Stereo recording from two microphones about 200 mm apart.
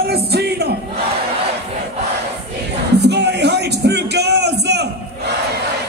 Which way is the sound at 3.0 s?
55° right (ahead or behind).